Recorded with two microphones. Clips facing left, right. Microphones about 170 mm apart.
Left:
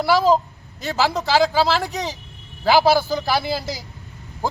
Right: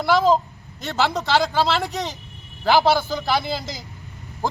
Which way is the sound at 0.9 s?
Centre (ahead or behind).